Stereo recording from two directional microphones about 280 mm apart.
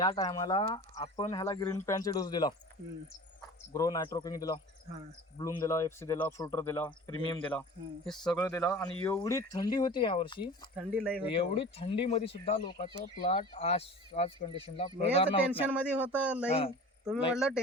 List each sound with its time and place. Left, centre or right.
0.0 s speech: centre
3.7 s speech: centre
8.3 s speech: centre
10.8 s speech: centre
11.3 s speech: centre
15.6 s speech: centre